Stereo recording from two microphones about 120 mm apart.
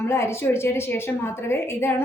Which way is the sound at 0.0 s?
20° left (ahead or behind).